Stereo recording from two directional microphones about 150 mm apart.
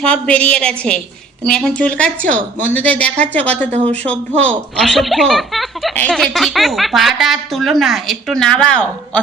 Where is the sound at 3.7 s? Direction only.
45° right (ahead or behind).